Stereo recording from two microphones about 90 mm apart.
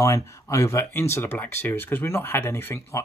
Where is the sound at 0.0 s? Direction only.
35° left (ahead or behind).